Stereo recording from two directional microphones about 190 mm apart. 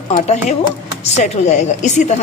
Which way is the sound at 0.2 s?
40° left (ahead or behind).